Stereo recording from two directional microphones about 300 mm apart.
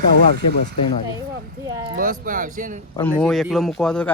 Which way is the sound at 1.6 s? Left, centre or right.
Centre.